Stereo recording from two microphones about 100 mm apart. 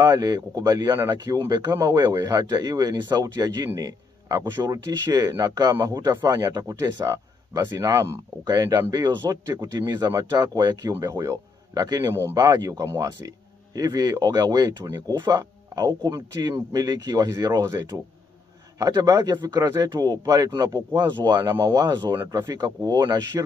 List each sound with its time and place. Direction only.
0.0 s a man's voice: 40° right (ahead or behind)
10.9 s a man's voice: 30° right (ahead or behind)
19.6 s a man's voice: 30° right (ahead or behind)